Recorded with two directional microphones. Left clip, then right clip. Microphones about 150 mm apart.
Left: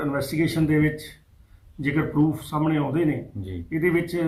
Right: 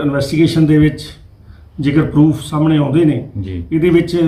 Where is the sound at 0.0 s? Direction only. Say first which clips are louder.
Right 10 dB; 15° right (ahead or behind).